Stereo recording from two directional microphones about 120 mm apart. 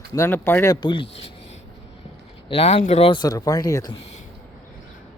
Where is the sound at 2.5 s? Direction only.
55° left (ahead or behind).